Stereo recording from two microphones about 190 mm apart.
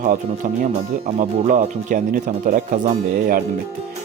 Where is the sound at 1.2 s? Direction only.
45° right (ahead or behind).